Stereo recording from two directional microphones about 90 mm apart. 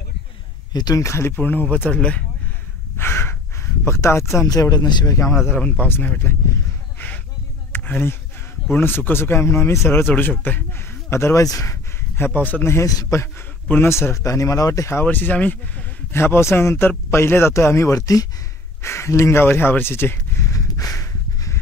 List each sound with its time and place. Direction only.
0.7 s speech: 45° left (ahead or behind)
1.0 s speech: 30° left (ahead or behind)
3.0 s speech: 25° left (ahead or behind); by 5.1 s 55° left (ahead or behind)
5.1 s a man's voice: 35° left (ahead or behind)
5.5 s speech: 15° left (ahead or behind)
7.7 s a sound: 20° left (ahead or behind)
8.7 s speech: 20° left (ahead or behind)
11.5 s a sound: 30° left (ahead or behind)
12.3 s speech: 15° left (ahead or behind)
12.7 s a man's voice: 35° left (ahead or behind)
13.7 s speech: 25° left (ahead or behind)
18.8 s a sound: 30° left (ahead or behind)